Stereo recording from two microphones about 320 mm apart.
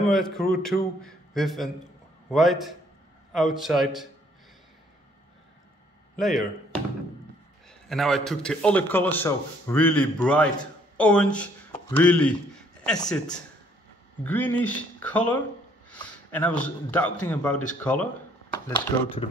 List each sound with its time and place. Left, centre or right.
0.1 s a man's voice: centre
6.1 s a man's voice: centre
7.9 s a man's voice: centre